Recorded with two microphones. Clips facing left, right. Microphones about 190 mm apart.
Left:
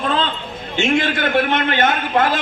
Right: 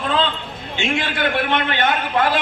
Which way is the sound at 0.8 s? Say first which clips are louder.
Left 4 dB; 45° left (ahead or behind).